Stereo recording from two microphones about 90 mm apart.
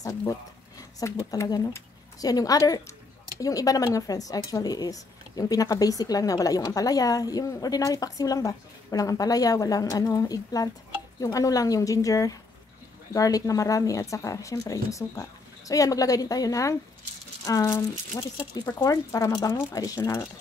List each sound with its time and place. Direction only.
0.2 s a woman's voice: 40° left (ahead or behind)
18.1 s a woman's voice: 45° left (ahead or behind)